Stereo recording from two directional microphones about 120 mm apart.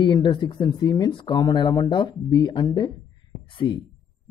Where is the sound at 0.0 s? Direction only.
40° left (ahead or behind).